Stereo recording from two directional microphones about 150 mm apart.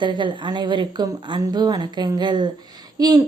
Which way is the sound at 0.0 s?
30° right (ahead or behind).